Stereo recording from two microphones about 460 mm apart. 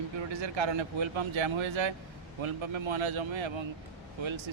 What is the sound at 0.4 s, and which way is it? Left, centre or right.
Speech, right.